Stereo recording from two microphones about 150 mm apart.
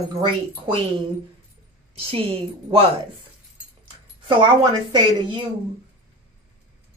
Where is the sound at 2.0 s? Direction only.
40° right (ahead or behind).